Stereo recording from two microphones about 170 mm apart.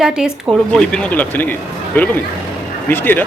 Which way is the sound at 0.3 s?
5° left (ahead or behind).